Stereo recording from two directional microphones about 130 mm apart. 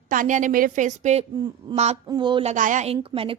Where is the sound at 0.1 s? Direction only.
80° right; by 1.2 s 65° right (ahead or behind).